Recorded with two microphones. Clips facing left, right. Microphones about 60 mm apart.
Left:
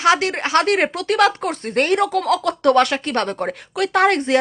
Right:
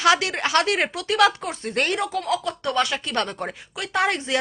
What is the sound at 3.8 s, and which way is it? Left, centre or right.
Speech, left.